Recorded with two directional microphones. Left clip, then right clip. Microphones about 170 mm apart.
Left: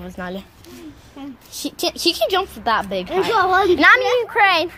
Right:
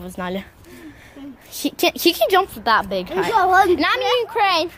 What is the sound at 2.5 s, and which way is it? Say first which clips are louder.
Speech: right 2 dB; 10° right (ahead or behind).